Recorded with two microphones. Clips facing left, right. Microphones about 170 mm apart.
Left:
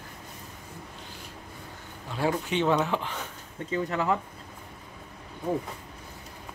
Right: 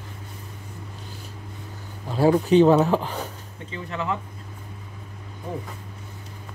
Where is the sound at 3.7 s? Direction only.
40° left (ahead or behind).